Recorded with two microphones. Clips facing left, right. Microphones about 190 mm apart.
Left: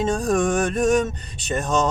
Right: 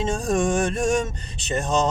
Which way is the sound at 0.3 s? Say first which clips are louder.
Right 1 dB; 25° right (ahead or behind).